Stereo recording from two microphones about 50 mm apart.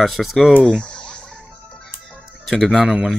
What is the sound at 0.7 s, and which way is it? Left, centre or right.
Fowl, centre.